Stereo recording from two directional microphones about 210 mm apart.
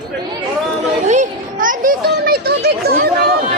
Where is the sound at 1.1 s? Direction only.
35° right (ahead or behind).